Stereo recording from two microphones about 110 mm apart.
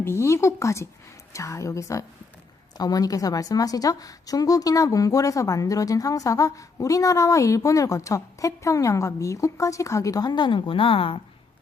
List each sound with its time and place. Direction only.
0.0 s a woman's voice: 25° left (ahead or behind); by 11.2 s 55° left (ahead or behind)